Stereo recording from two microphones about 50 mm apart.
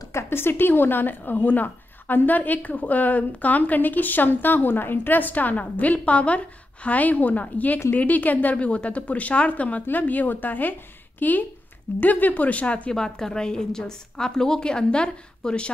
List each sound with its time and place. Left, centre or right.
0.1 s a woman's voice: left
12.9 s a woman's voice: centre